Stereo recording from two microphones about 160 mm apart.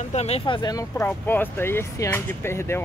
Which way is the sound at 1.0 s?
15° left (ahead or behind).